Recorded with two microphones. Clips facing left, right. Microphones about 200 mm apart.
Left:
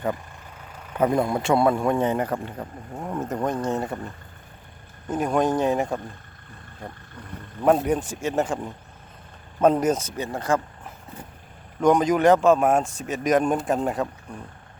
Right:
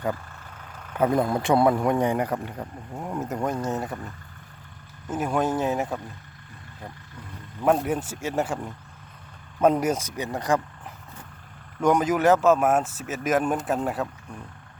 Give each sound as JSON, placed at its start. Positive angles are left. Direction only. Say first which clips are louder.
{"t": 0.8, "sound": "vehicle", "louder": "left 1 dB", "side_deg": 10}
{"t": 1.4, "sound": "speech", "louder": "right 1 dB", "side_deg": -20}
{"t": 2.6, "sound": "speech", "louder": "left 1 dB", "side_deg": 0}
{"t": 5.0, "sound": "speech", "louder": "left 3 dB", "side_deg": -5}
{"t": 7.6, "sound": "speech", "louder": "left 3 dB", "side_deg": -5}
{"t": 9.6, "sound": "speech", "louder": "left 2 dB", "side_deg": -10}
{"t": 11.8, "sound": "speech", "louder": "left 3 dB", "side_deg": -10}